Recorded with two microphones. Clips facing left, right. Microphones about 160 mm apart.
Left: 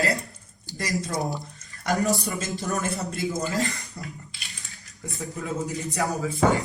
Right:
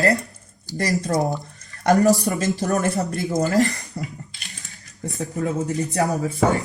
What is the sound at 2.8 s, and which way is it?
Speech, 65° right (ahead or behind).